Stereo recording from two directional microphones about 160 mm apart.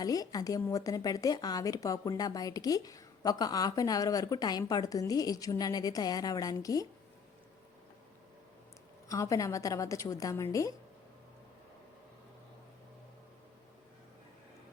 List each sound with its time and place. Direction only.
0.0 s speech: 25° left (ahead or behind)
9.0 s speech: 20° left (ahead or behind)